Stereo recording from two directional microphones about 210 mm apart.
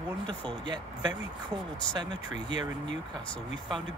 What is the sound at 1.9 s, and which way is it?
Speech, 20° right (ahead or behind).